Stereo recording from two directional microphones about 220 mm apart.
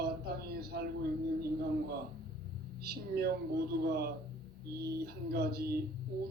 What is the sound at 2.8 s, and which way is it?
Speech, 45° right (ahead or behind).